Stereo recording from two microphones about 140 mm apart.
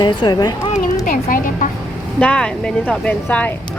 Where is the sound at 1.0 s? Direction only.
80° left.